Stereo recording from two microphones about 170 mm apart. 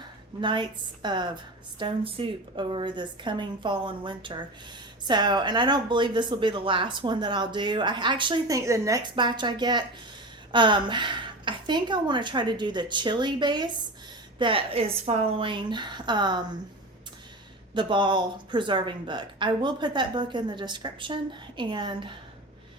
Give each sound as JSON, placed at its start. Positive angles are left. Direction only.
{"t": 0.4, "sound": "a woman's voice", "side_deg": -30}
{"t": 17.7, "sound": "a woman's voice", "side_deg": -30}